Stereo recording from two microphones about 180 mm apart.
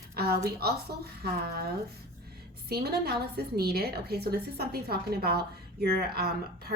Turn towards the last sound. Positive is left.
turn(degrees=-60)  # may be behind; listen again after turning